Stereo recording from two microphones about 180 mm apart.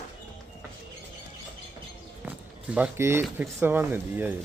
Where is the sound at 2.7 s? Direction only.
10° right (ahead or behind).